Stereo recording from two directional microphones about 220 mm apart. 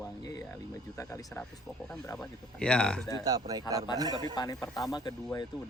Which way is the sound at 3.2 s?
15° right (ahead or behind).